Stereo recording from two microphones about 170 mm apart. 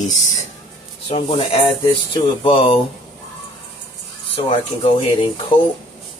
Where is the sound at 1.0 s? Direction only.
35° left (ahead or behind).